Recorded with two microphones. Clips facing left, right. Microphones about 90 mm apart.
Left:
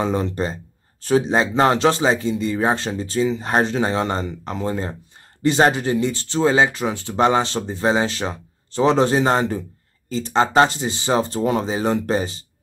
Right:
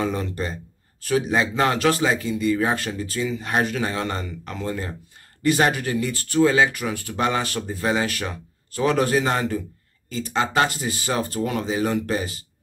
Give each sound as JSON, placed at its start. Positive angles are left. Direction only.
{"t": 0.0, "sound": "speech", "side_deg": 30}